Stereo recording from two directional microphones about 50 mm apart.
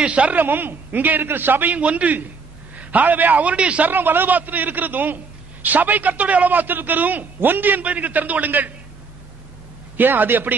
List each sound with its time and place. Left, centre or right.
0.0 s a man's voice: right
0.4 s a man's voice: right
3.8 s a man's voice: right
9.9 s a man's voice: right